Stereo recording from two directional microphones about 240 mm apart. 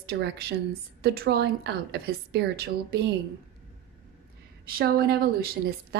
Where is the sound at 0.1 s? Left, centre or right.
Right.